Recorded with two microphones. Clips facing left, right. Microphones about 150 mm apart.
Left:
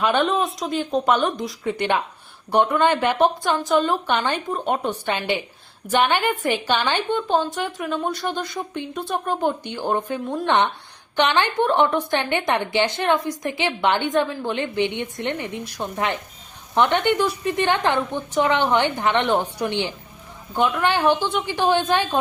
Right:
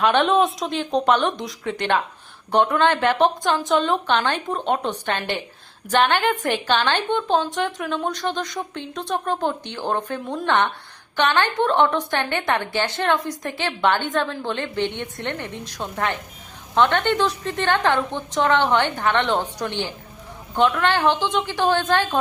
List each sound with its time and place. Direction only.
0.0 s a woman's voice: centre (ahead or behind)